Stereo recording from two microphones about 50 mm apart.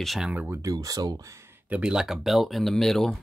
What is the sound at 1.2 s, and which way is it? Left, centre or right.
Speech, right.